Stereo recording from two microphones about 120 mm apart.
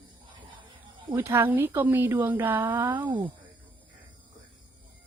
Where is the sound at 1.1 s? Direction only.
20° right (ahead or behind).